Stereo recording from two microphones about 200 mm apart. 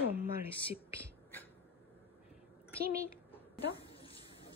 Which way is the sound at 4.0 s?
30° left (ahead or behind).